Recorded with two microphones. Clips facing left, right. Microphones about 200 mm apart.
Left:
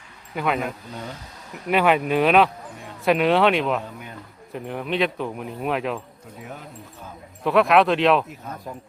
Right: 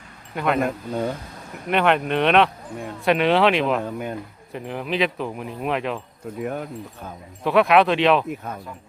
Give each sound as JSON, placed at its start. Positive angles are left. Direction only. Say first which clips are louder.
{"t": 0.3, "sound": "speech", "louder": "right 2 dB", "side_deg": 0}
{"t": 0.6, "sound": "speech", "louder": "right 7 dB", "side_deg": -55}
{"t": 1.7, "sound": "speech", "louder": "left 1 dB", "side_deg": 5}
{"t": 6.4, "sound": "speech", "louder": "right 10 dB", "side_deg": -55}
{"t": 7.4, "sound": "speech", "louder": "right 1 dB", "side_deg": 0}